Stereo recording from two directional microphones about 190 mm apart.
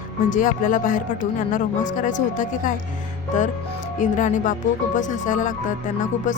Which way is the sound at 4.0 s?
40° left (ahead or behind).